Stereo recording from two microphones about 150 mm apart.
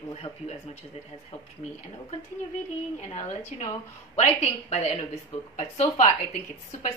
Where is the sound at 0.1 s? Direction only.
40° left (ahead or behind).